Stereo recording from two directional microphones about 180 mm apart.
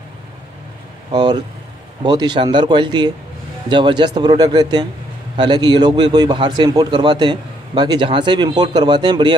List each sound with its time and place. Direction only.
1.1 s a man's voice: 25° right (ahead or behind)